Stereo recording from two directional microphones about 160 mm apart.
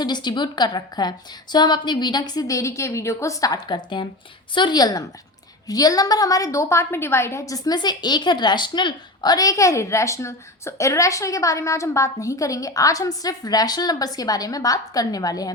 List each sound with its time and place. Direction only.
0.0 s a woman's voice: 25° left (ahead or behind)